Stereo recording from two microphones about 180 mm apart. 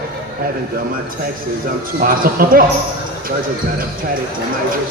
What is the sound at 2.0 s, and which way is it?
Speech, 50° right (ahead or behind).